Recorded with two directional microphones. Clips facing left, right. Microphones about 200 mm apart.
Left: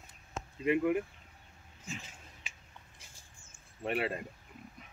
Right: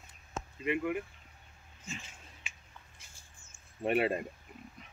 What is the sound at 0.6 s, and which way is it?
Speech, 35° left (ahead or behind).